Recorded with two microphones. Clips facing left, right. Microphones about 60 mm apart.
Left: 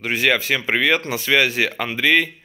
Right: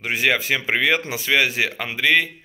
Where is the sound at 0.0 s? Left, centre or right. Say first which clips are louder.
Left 1 dB; centre.